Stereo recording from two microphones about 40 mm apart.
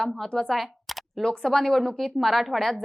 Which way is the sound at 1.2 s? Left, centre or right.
Centre.